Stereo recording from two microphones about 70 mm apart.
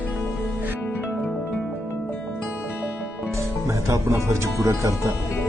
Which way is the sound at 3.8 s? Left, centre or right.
Right.